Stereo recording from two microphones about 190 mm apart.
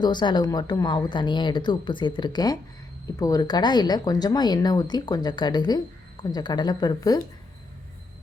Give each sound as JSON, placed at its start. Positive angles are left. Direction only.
{"t": 0.0, "sound": "speech", "side_deg": 25}